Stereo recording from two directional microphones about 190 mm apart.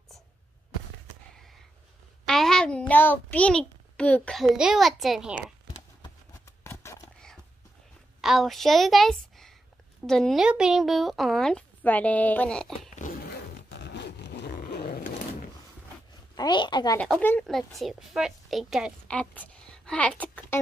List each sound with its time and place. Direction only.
2.2 s a child's voice: centre (ahead or behind)
6.4 s a sound: 15° left (ahead or behind)
8.2 s a woman's voice: centre (ahead or behind)
13.0 s zipper: 55° left (ahead or behind)
16.3 s a woman's voice: 25° left (ahead or behind)
17.0 s speech: 10° left (ahead or behind)
19.0 s a woman's voice: 5° left (ahead or behind)